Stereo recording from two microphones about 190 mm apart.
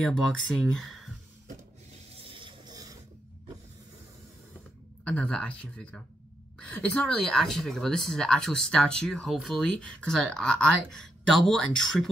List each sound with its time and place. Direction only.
0.0 s speech: centre (ahead or behind)
2.1 s printer: 30° right (ahead or behind)
5.0 s speech: 5° left (ahead or behind)